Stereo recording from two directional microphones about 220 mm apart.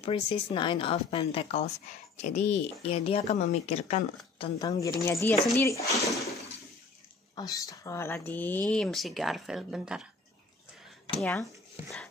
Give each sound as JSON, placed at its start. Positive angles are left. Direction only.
{"t": 0.0, "sound": "speech", "side_deg": 25}
{"t": 4.4, "sound": "speech", "side_deg": 15}
{"t": 5.9, "sound": "bathtub", "side_deg": 0}
{"t": 7.3, "sound": "speech", "side_deg": 15}
{"t": 11.1, "sound": "speech", "side_deg": 0}